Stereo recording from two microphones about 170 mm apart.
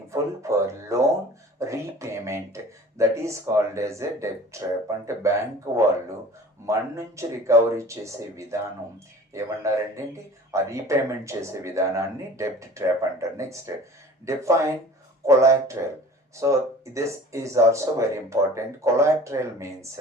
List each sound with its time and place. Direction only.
0.1 s speech: 15° right (ahead or behind)
1.5 s a sound: 15° right (ahead or behind)
3.0 s speech: 15° right (ahead or behind)
6.7 s speech: 15° right (ahead or behind)